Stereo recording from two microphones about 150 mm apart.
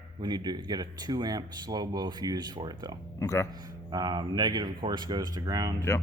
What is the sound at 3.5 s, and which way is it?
Speech, 25° right (ahead or behind).